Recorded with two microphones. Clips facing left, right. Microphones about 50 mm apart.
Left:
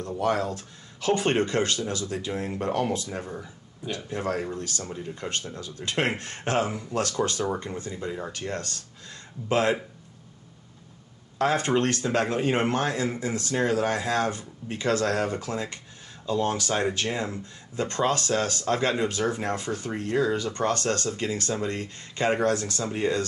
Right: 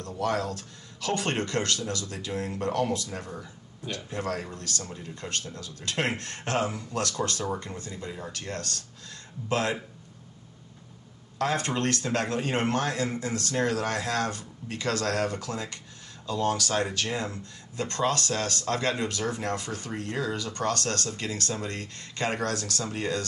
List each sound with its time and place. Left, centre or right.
0.2 s speech: left
11.3 s speech: left